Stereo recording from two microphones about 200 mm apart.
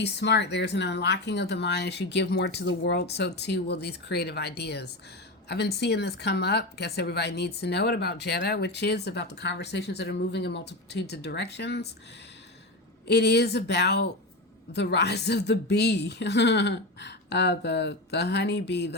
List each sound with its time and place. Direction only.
0.0 s speech: 60° left (ahead or behind)
13.1 s speech: 55° left (ahead or behind)